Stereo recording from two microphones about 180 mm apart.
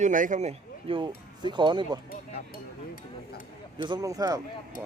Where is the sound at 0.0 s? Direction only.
45° right (ahead or behind); by 2.0 s 25° right (ahead or behind).